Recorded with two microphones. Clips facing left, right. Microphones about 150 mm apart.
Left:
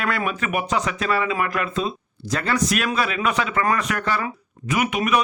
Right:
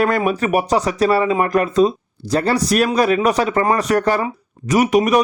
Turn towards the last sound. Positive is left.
turn(degrees=-40)  # may be behind; listen again after turning